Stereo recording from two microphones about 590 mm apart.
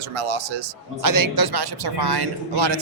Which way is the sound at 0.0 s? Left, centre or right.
Right.